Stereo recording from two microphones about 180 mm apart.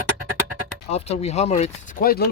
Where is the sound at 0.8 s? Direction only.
35° left (ahead or behind); by 2.3 s 60° left (ahead or behind).